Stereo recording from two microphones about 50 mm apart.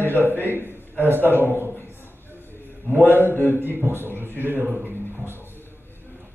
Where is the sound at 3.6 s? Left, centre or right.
Right.